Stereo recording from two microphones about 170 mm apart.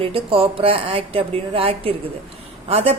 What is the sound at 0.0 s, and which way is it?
A woman's voice, 35° right (ahead or behind).